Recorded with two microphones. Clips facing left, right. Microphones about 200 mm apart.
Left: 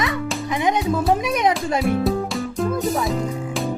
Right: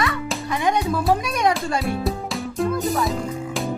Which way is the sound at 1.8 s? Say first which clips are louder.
Left 5 dB; centre (ahead or behind).